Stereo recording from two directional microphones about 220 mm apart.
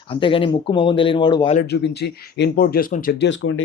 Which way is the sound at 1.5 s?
50° left (ahead or behind).